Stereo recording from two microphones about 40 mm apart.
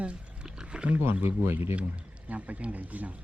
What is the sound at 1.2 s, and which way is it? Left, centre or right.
Speech, right.